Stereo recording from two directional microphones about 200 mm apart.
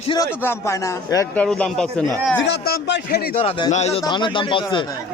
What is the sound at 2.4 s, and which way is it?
Speech, 55° left (ahead or behind).